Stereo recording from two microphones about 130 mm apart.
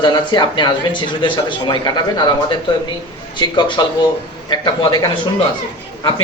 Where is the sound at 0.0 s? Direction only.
35° left (ahead or behind).